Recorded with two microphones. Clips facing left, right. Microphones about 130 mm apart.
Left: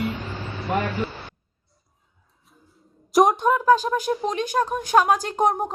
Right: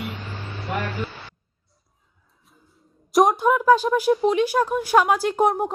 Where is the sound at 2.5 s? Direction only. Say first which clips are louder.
Left 2 dB; centre (ahead or behind).